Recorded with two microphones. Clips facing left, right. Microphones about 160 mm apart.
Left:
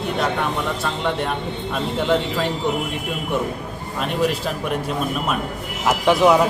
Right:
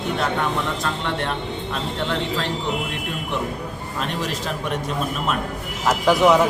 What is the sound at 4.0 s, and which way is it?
Speech, 5° left (ahead or behind).